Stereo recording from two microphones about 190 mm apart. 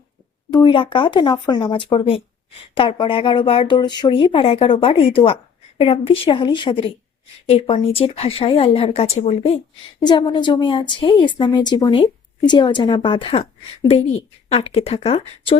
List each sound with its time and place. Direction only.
0.5 s speech: 25° left (ahead or behind)